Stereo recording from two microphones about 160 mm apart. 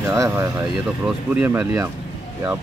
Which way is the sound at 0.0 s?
15° right (ahead or behind).